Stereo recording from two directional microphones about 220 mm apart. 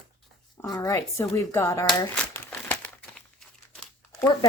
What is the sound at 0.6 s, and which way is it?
Speech, 15° left (ahead or behind).